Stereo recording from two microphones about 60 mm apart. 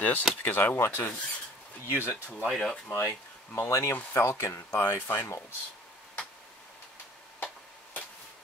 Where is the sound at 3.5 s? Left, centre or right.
Left.